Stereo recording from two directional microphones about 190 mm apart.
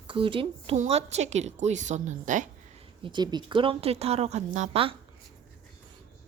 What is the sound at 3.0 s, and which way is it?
A woman's voice, 25° right (ahead or behind).